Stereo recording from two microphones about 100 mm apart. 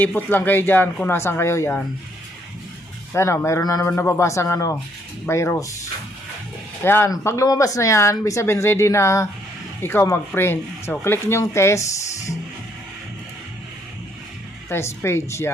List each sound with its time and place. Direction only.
0.0 s speech: 20° left (ahead or behind)
3.1 s a man's voice: 25° left (ahead or behind)
3.8 s speech: 25° left (ahead or behind)
6.8 s speech: 25° left (ahead or behind)
7.4 s speech: 35° left (ahead or behind)
14.7 s speech: 25° left (ahead or behind)